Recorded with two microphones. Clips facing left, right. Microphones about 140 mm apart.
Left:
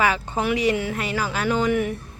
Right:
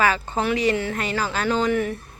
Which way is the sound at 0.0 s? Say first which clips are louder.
Right 1 dB; 15° left (ahead or behind).